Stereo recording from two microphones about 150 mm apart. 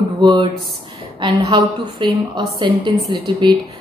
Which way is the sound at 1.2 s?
30° right (ahead or behind).